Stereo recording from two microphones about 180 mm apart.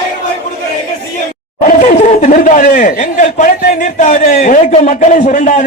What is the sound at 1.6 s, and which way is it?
Speech, 45° left (ahead or behind).